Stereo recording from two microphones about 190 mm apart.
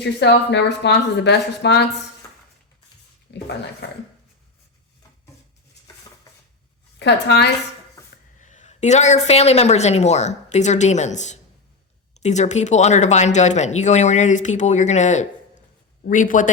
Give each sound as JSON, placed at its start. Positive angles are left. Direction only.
{"t": 0.0, "sound": "speech", "side_deg": 65}
{"t": 3.3, "sound": "speech", "side_deg": 65}
{"t": 7.0, "sound": "speech", "side_deg": 65}
{"t": 8.0, "sound": "dishes", "side_deg": 15}
{"t": 8.4, "sound": "speech", "side_deg": 40}